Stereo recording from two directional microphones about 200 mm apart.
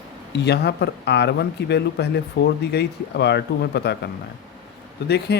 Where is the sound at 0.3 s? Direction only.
55° left (ahead or behind).